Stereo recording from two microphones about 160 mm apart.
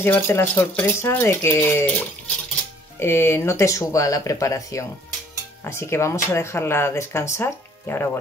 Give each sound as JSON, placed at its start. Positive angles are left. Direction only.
{"t": 0.0, "sound": "speech", "side_deg": 15}